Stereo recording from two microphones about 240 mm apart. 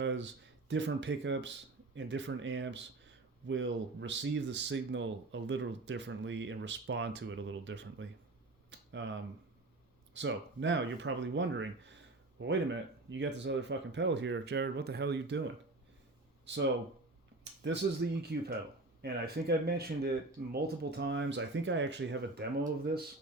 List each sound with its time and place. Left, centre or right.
0.0 s speech: right
16.5 s speech: right